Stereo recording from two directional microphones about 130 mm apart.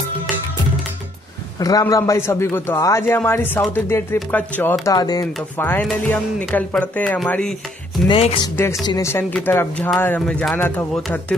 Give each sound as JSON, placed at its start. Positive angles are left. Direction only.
{"t": 1.6, "sound": "a man's voice", "side_deg": 30}
{"t": 4.9, "sound": "a man's voice", "side_deg": 30}
{"t": 5.6, "sound": "speech", "side_deg": 15}
{"t": 8.1, "sound": "speech", "side_deg": 50}
{"t": 8.8, "sound": "a man's voice", "side_deg": 25}